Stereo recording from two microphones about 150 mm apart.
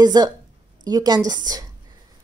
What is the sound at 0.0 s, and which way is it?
A woman's voice, 25° right (ahead or behind).